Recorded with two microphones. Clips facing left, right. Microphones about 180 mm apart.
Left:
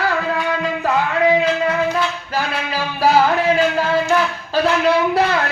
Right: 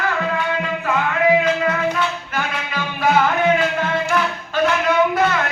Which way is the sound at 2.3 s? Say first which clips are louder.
Left 3 dB; 35° left (ahead or behind).